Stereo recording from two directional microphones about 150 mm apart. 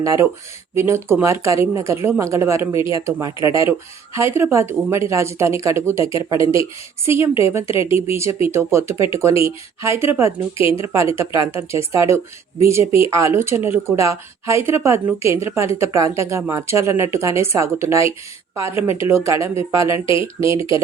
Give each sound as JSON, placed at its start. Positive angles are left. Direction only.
{"t": 0.0, "sound": "a woman's voice", "side_deg": -20}